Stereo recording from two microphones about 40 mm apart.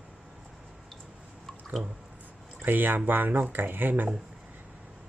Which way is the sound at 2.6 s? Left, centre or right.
Right.